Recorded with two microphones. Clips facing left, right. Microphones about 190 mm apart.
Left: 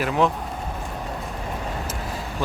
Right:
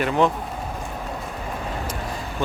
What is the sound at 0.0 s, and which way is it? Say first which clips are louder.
Speech: right 1 dB; centre (ahead or behind).